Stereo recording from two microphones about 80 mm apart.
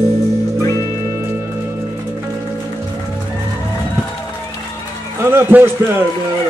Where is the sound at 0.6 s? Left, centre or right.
Left.